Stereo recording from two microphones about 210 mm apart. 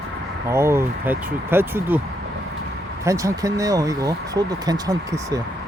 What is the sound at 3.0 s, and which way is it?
Speech, 15° right (ahead or behind).